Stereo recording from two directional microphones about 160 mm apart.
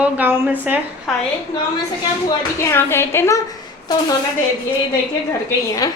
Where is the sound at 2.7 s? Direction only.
15° left (ahead or behind).